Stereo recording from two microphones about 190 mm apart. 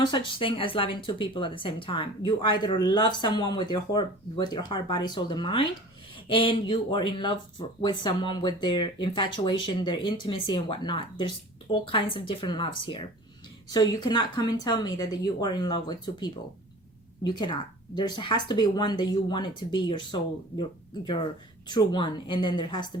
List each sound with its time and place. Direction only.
0.0 s speech: 25° left (ahead or behind)